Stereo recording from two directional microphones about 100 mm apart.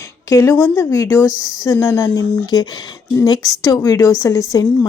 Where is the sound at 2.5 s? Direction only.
45° left (ahead or behind).